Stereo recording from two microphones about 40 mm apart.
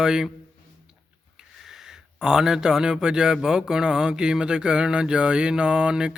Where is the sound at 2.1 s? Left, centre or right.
Centre.